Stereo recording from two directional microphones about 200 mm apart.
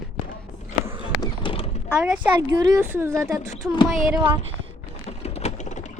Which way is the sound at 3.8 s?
Centre (ahead or behind).